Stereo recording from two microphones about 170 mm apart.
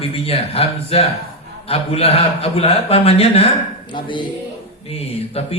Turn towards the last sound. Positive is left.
turn(degrees=35)  # may be behind; listen again after turning